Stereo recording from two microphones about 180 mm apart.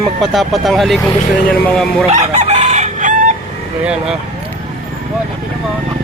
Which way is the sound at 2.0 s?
40° right (ahead or behind).